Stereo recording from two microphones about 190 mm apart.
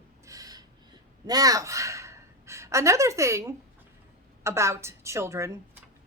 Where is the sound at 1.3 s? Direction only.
20° right (ahead or behind).